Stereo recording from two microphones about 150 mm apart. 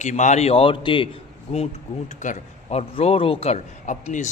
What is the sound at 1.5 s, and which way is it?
Speech, 45° left (ahead or behind).